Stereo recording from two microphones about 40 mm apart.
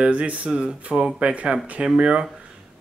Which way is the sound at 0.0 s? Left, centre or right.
Right.